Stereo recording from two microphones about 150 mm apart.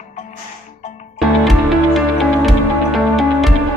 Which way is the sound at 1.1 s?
Centre (ahead or behind).